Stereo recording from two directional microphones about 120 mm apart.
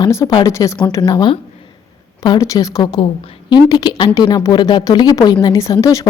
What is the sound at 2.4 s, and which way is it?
A woman's voice, 30° left (ahead or behind).